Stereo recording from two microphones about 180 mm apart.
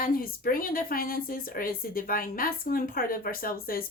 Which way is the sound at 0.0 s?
55° left (ahead or behind).